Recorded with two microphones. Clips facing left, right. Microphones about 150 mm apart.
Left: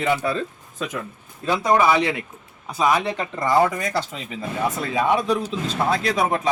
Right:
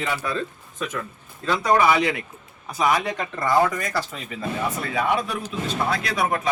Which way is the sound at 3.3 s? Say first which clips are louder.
Left 1 dB; 25° left (ahead or behind).